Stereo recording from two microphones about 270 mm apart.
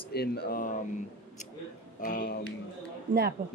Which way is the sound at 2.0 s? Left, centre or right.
Left.